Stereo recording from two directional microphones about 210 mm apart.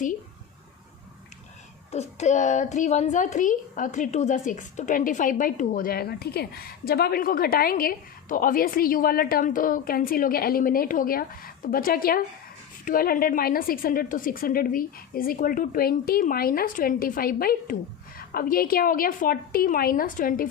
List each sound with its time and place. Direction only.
1.9 s a child's voice: 30° left (ahead or behind)